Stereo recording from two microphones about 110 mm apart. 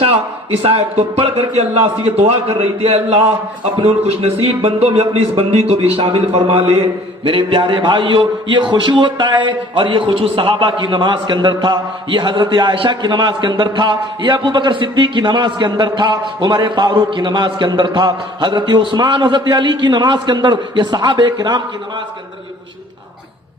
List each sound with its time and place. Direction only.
0.6 s a man's voice: 60° right (ahead or behind); by 21.6 s 40° right (ahead or behind)